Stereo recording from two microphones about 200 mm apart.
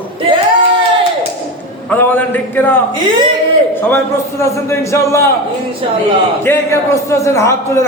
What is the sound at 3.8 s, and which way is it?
A man's voice, 10° left (ahead or behind).